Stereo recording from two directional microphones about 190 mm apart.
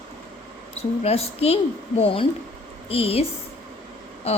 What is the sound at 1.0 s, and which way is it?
A woman's voice, 30° left (ahead or behind).